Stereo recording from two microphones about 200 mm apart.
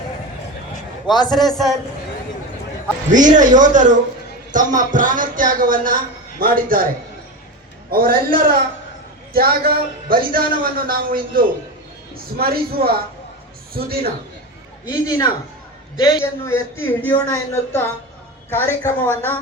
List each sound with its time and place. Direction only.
1.0 s a man's voice: 20° left (ahead or behind)
1.4 s a man's voice: centre (ahead or behind)
3.1 s a man's voice: 40° right (ahead or behind)
7.9 s a man's voice: 45° right (ahead or behind)
14.8 s speech: 20° left (ahead or behind)